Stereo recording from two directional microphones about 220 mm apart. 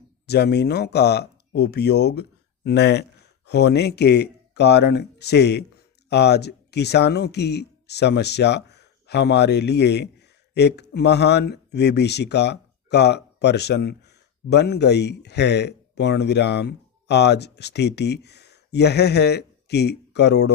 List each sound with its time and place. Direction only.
0.3 s speech: 50° left (ahead or behind)